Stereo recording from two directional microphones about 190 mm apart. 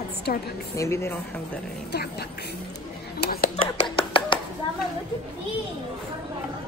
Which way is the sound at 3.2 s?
50° left (ahead or behind).